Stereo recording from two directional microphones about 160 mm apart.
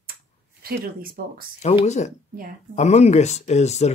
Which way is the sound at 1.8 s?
45° left (ahead or behind).